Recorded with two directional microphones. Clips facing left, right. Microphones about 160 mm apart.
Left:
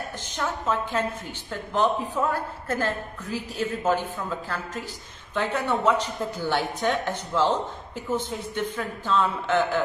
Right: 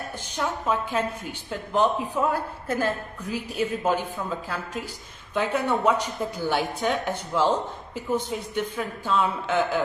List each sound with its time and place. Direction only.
0.4 s speech: 10° right (ahead or behind)
5.3 s speech: 10° right (ahead or behind)